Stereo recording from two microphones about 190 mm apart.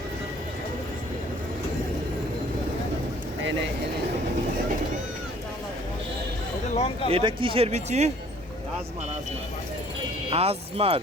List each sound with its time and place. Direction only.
6.7 s speech: 30° left (ahead or behind)
7.1 s speech: 25° right (ahead or behind)
10.2 s speech: 30° right (ahead or behind)